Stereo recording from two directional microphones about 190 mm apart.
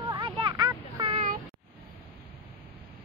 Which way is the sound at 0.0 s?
25° right (ahead or behind).